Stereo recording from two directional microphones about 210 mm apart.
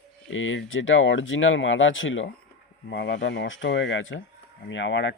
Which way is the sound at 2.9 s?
55° left (ahead or behind).